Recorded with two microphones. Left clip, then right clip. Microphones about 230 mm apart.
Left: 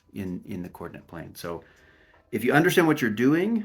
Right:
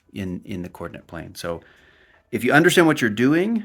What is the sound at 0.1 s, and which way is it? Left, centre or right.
Speech, right.